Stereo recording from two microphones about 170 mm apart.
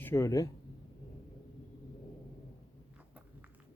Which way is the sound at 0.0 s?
15° left (ahead or behind).